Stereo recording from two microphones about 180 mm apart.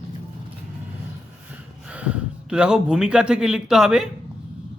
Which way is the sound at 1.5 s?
5° right (ahead or behind).